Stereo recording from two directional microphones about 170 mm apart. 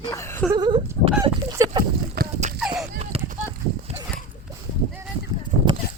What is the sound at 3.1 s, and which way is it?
Clip-clop, 35° right (ahead or behind).